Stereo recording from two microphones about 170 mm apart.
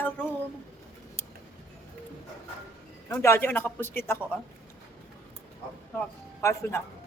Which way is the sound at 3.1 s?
15° left (ahead or behind).